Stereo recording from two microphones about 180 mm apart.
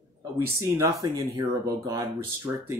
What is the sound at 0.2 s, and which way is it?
Speech, 20° right (ahead or behind).